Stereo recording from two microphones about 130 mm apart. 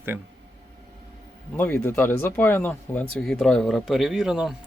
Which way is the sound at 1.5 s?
15° left (ahead or behind).